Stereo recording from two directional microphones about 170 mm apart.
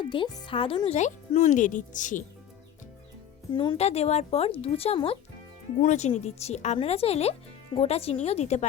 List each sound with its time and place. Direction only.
0.0 s speech: 30° left (ahead or behind); by 2.2 s 50° left (ahead or behind)
3.5 s speech: 25° left (ahead or behind)
3.8 s speech: 40° left (ahead or behind)